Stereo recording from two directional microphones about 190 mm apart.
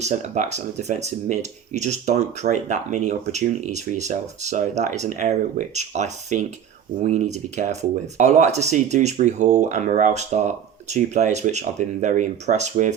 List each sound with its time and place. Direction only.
0.0 s speech: 40° right (ahead or behind)